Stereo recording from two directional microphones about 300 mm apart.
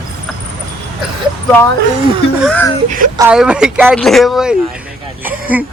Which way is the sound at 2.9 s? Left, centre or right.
Right.